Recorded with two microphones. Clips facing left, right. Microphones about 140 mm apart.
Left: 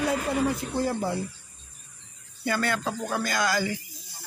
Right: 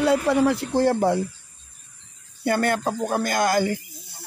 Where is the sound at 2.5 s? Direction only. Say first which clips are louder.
Right 5 dB; 50° right (ahead or behind).